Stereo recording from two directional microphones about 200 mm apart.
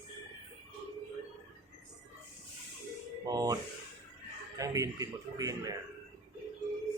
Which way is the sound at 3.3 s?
20° right (ahead or behind).